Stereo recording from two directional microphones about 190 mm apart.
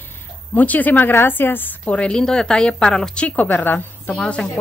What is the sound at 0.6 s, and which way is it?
A woman's voice, 10° left (ahead or behind).